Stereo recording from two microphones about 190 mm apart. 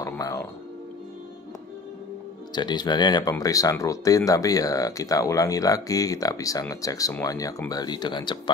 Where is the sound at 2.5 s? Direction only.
20° left (ahead or behind).